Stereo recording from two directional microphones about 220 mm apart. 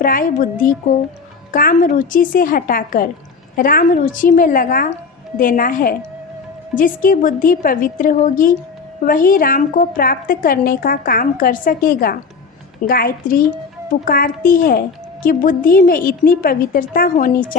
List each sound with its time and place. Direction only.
0.0 s a woman's voice: 40° left (ahead or behind)